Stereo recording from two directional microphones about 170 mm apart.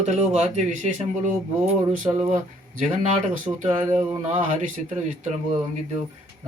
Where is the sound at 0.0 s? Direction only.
45° right (ahead or behind).